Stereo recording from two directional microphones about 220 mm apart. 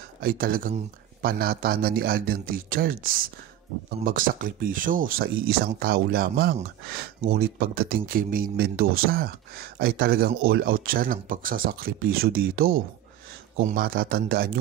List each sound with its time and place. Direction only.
0.2 s speech: 40° right (ahead or behind)